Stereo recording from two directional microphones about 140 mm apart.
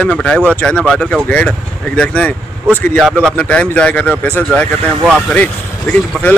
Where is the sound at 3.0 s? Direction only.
10° right (ahead or behind).